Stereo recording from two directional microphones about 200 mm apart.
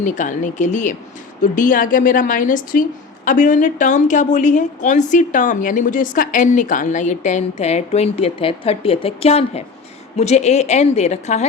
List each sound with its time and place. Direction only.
0.0 s a woman's voice: 40° left (ahead or behind)